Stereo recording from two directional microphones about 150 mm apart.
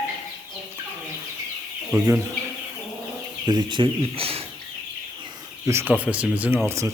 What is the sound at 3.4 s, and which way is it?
Speech, 30° right (ahead or behind).